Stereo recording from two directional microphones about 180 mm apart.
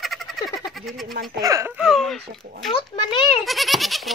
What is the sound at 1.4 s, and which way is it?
Speech, 15° right (ahead or behind).